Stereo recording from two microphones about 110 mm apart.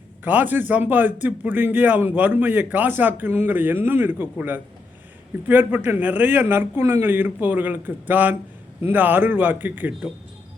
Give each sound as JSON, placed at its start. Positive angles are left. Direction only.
{"t": 0.3, "sound": "a man's voice", "side_deg": -15}